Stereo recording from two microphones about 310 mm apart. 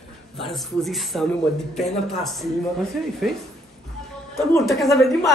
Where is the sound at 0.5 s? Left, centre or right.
Centre.